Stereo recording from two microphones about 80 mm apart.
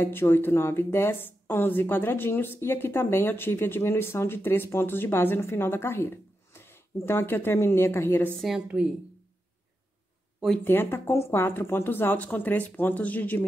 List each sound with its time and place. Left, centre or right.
0.0 s a woman's voice: left
8.4 s a woman's voice: centre
10.6 s a woman's voice: left